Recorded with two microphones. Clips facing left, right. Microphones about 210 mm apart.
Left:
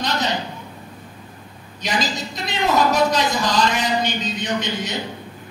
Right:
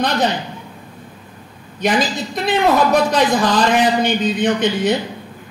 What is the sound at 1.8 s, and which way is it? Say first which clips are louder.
Speech: right 6 dB; 55° right (ahead or behind).